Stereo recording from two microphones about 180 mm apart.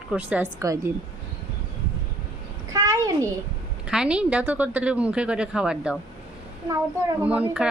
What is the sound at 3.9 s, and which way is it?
A woman's voice, 5° right (ahead or behind).